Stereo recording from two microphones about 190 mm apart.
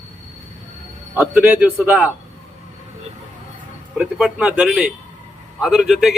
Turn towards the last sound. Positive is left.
turn(degrees=0)  # may be behind; listen again after turning